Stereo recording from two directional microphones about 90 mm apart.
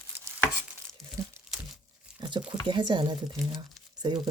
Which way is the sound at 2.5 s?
60° right (ahead or behind).